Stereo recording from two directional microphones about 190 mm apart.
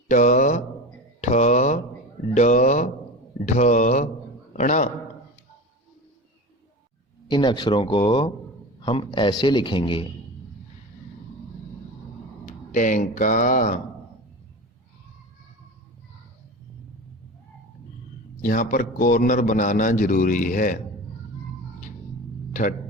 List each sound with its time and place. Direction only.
0.1 s speech: 40° left (ahead or behind)
7.3 s speech: 25° left (ahead or behind)
12.7 s a man's voice: 45° left (ahead or behind)
18.4 s a man's voice: 45° left (ahead or behind)